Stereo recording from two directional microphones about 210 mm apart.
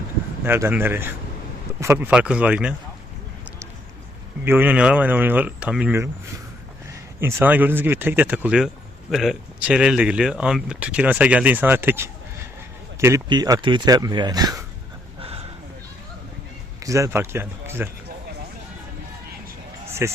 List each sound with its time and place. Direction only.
0.4 s speech: 10° right (ahead or behind)
4.4 s speech: 10° right (ahead or behind)
7.2 s speech: 10° right (ahead or behind)
16.8 s speech: 15° right (ahead or behind)
20.0 s speech: 10° right (ahead or behind)